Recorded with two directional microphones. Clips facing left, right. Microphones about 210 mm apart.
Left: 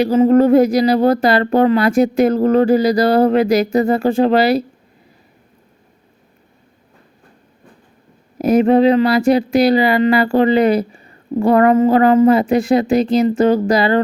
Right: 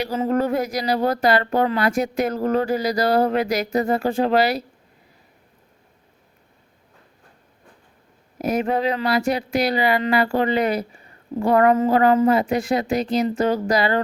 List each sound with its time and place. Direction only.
0.0 s speech: 25° left (ahead or behind)
8.4 s speech: 30° left (ahead or behind)